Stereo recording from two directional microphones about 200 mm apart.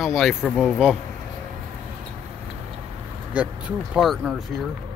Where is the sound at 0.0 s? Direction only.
Centre (ahead or behind).